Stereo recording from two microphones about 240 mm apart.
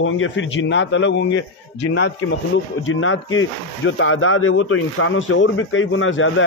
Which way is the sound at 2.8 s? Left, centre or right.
Left.